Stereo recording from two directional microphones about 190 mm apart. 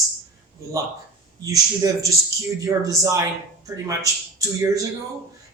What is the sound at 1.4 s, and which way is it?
Speech, 20° right (ahead or behind).